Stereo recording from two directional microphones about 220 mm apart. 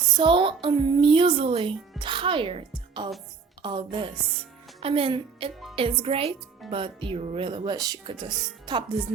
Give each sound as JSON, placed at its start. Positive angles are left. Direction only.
{"t": 0.1, "sound": "a woman's voice", "side_deg": -20}